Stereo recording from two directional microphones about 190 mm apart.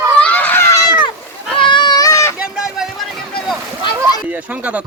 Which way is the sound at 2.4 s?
5° right (ahead or behind).